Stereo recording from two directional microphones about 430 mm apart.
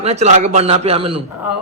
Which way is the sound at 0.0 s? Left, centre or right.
Centre.